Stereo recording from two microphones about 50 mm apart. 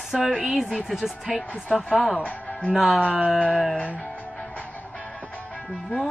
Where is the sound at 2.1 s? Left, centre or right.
Left.